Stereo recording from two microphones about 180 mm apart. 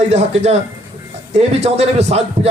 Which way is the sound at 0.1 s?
35° right (ahead or behind).